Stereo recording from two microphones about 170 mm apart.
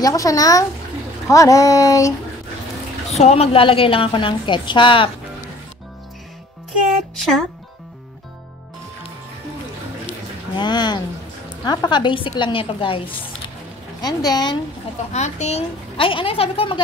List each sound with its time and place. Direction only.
0.0 s a woman's voice: 20° left (ahead or behind)
3.1 s a woman's voice: 40° left (ahead or behind)
10.5 s a woman's voice: 25° left (ahead or behind)
15.1 s a woman's voice: 40° left (ahead or behind)